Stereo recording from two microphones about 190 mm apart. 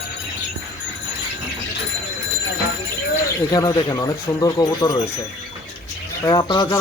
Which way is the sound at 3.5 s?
20° left (ahead or behind).